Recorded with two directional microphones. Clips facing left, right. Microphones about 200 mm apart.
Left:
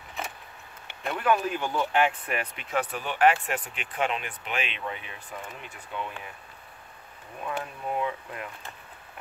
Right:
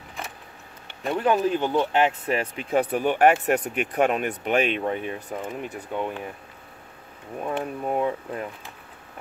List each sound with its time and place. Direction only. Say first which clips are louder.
1.1 s speech: right 4 dB; 30° right (ahead or behind)
2.9 s speech: right 3 dB; 55° right (ahead or behind)
7.4 s speech: right 5 dB; 40° right (ahead or behind)